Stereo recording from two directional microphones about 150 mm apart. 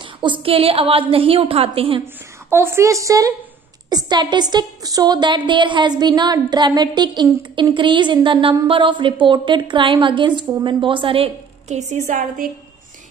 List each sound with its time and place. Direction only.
0.0 s a woman's voice: 35° right (ahead or behind)
2.5 s a woman's voice: 15° right (ahead or behind); by 12.4 s 60° right (ahead or behind)